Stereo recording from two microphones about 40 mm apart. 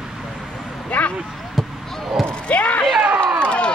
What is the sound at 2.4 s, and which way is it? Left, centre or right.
Basketball bounce, left.